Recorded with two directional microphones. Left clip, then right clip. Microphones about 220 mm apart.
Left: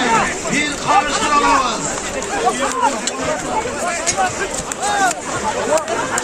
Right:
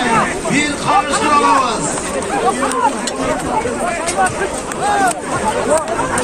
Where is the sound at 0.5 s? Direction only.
50° right (ahead or behind).